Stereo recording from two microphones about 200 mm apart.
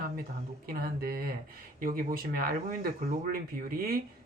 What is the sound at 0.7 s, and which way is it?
Speech, 45° right (ahead or behind).